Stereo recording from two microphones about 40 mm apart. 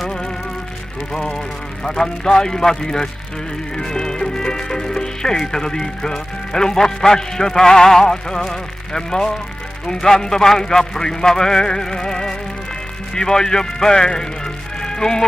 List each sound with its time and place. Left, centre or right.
1.1 s a man's voice: centre
14.8 s music: centre